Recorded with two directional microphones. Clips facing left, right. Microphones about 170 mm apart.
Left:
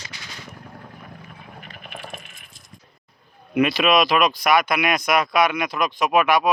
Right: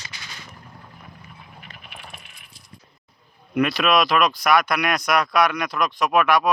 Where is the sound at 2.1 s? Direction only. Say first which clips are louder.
Left 6 dB; 45° left (ahead or behind).